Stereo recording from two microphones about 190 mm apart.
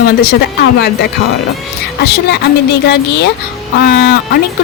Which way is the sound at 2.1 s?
55° left (ahead or behind).